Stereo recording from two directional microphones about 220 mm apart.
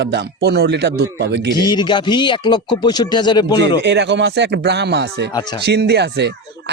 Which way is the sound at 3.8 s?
50° right (ahead or behind).